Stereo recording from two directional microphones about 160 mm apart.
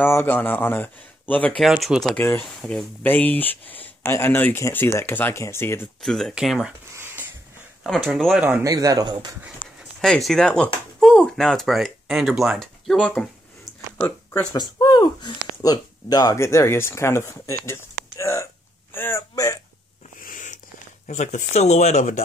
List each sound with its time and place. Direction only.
0.0 s speech: 15° left (ahead or behind)
1.6 s speech: 5° right (ahead or behind); by 5.8 s 15° left (ahead or behind)
6.0 s speech: centre (ahead or behind)
7.0 s a sound: 15° right (ahead or behind)
7.8 s speech: centre (ahead or behind)
8.5 s a man's voice: 15° right (ahead or behind)
10.0 s speech: 5° left (ahead or behind)
14.5 s speech: 25° left (ahead or behind)
20.2 s a sound: 60° left (ahead or behind)
21.1 s speech: 50° left (ahead or behind)